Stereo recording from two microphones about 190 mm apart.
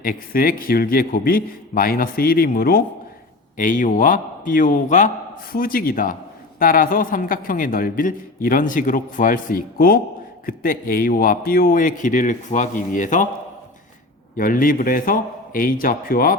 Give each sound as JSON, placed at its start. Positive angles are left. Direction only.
{"t": 0.0, "sound": "a man's voice", "side_deg": 50}
{"t": 14.3, "sound": "a man's voice", "side_deg": 45}